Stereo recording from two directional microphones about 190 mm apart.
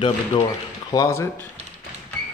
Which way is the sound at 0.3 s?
25° left (ahead or behind).